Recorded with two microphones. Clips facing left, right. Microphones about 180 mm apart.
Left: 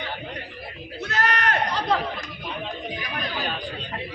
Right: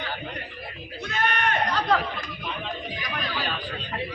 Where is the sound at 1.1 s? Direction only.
80° left.